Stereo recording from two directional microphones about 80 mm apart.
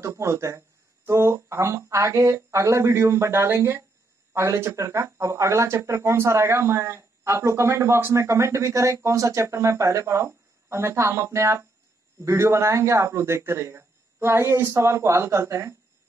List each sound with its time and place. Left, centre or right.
0.0 s speech: right